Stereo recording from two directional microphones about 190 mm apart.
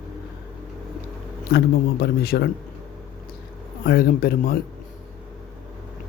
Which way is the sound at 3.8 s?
55° left (ahead or behind).